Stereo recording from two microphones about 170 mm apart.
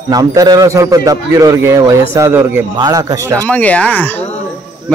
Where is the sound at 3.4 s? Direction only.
10° left (ahead or behind).